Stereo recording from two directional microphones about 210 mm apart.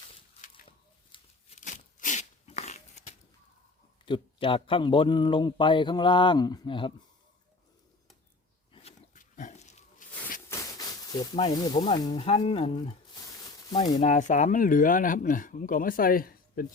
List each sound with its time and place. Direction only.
1.1 s a sound: 30° left (ahead or behind)
4.0 s speech: 25° left (ahead or behind)
8.7 s pig: 30° left (ahead or behind)
10.5 s snake: 15° left (ahead or behind)
11.9 s speech: 25° left (ahead or behind); by 16.6 s 45° left (ahead or behind)